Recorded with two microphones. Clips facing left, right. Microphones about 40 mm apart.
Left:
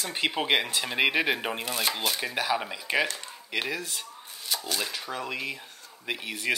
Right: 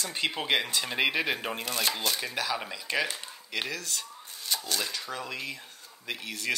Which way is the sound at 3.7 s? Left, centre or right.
Centre.